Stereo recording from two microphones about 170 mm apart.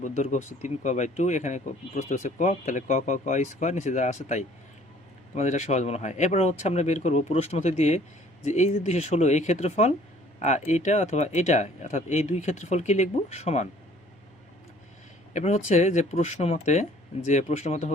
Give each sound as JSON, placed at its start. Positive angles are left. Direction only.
{"t": 0.0, "sound": "speech", "side_deg": 45}
{"t": 15.3, "sound": "speech", "side_deg": 40}